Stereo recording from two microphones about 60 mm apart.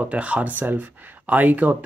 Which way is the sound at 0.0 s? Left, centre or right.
Right.